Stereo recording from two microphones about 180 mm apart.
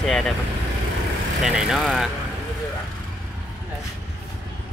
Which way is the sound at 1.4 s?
Centre (ahead or behind).